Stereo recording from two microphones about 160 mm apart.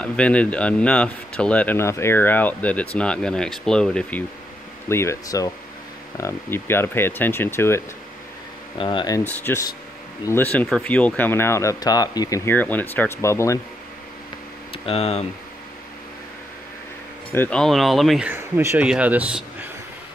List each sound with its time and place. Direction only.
0.0 s speech: 5° left (ahead or behind)
4.8 s speech: 15° left (ahead or behind)
8.7 s speech: 30° left (ahead or behind)
9.2 s speech: 10° left (ahead or behind)
12.4 s speech: 10° left (ahead or behind)
14.7 s speech: 40° left (ahead or behind)
17.3 s speech: 10° left (ahead or behind)
18.3 s speech: 15° right (ahead or behind)